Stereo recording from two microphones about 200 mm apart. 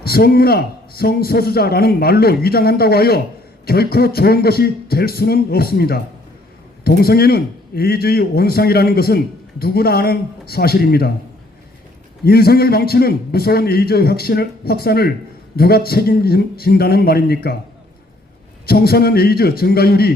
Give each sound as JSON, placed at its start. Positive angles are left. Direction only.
{"t": 0.0, "sound": "a man's voice", "side_deg": 50}
{"t": 12.2, "sound": "a man's voice", "side_deg": 50}
{"t": 18.6, "sound": "a man's voice", "side_deg": 50}